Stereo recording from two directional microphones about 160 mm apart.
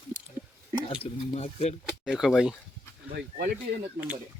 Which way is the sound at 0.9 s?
40° left (ahead or behind).